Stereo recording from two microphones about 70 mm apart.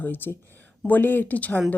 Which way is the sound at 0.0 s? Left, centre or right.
Left.